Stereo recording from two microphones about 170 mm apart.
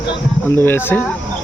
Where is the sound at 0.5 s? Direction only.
10° left (ahead or behind).